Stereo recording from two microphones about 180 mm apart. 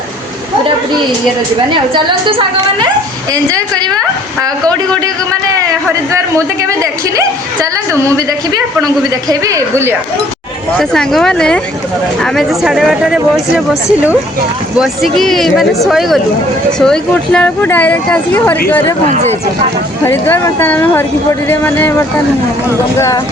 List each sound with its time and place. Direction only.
3.3 s a woman's voice: 20° right (ahead or behind)
7.2 s a woman's voice: 15° right (ahead or behind)
9.3 s a woman's voice: 20° right (ahead or behind)
10.8 s speech: centre (ahead or behind)
14.8 s speech: centre (ahead or behind)
20.1 s speech: 15° left (ahead or behind)